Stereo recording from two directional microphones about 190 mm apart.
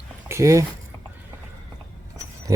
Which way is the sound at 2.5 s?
15° right (ahead or behind).